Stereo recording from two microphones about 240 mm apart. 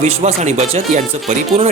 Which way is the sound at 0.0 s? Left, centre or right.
Right.